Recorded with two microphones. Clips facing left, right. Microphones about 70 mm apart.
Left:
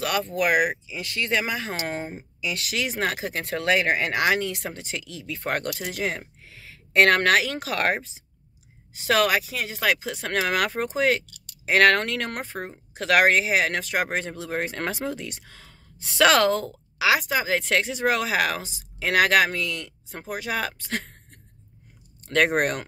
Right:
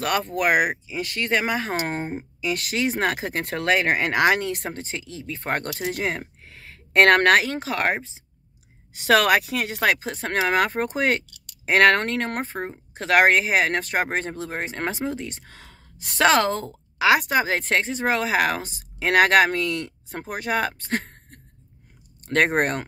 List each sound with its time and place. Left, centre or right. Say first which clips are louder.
0.0 s speech: right 2 dB; right
7.5 s speech: right 1 dB; right
8.9 s speech: right 3 dB; right
15.4 s whispering: right 2 dB; right
16.2 s speech: even; right
17.0 s speech: right 3 dB; right
22.4 s speech: right 1 dB; right